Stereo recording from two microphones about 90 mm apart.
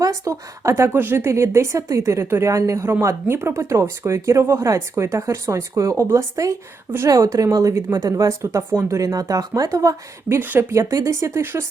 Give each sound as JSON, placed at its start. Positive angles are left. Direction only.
{"t": 0.0, "sound": "speech", "side_deg": -35}